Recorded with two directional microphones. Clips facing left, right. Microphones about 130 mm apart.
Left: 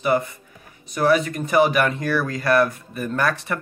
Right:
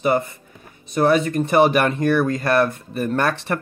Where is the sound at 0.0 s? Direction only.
25° right (ahead or behind).